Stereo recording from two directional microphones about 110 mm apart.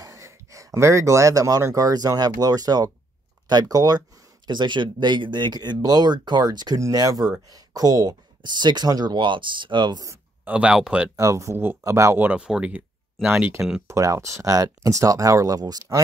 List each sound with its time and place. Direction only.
0.0 s speech: 30° right (ahead or behind)
10.4 s speech: 10° right (ahead or behind)
11.1 s speech: 30° right (ahead or behind); by 13.3 s 10° right (ahead or behind)
13.8 s speech: 25° right (ahead or behind)